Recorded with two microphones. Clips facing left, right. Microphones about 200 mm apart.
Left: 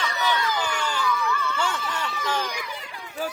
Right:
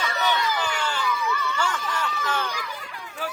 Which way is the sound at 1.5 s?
25° left (ahead or behind).